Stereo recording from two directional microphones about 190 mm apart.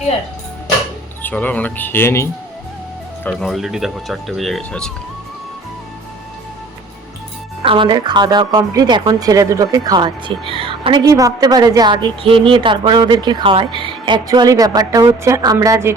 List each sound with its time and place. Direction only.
1.2 s speech: 10° left (ahead or behind)
3.2 s speech: centre (ahead or behind)
7.6 s speech: 25° right (ahead or behind)